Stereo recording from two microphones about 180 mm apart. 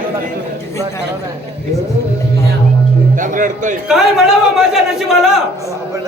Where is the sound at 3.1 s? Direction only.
45° right (ahead or behind).